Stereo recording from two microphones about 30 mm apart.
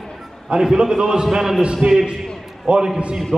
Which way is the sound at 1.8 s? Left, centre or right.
Right.